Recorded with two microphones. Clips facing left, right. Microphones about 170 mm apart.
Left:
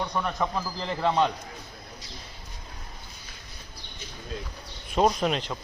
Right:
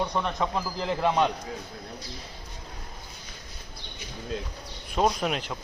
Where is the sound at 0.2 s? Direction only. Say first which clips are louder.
Even; 15° right (ahead or behind).